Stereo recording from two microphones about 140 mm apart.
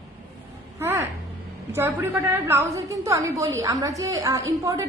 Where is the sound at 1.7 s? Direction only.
15° right (ahead or behind).